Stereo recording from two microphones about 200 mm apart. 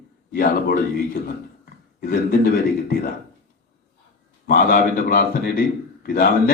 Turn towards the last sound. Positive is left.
turn(degrees=50)  # may be behind; listen again after turning